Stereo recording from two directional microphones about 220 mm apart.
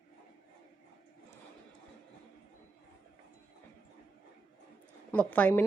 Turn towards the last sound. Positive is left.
turn(degrees=5)  # may be behind; listen again after turning